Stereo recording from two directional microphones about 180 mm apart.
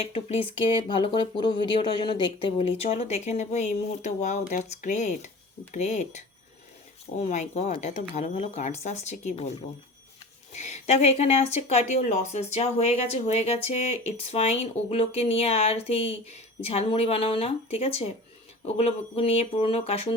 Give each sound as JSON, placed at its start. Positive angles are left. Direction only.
{"t": 0.0, "sound": "speech", "side_deg": 35}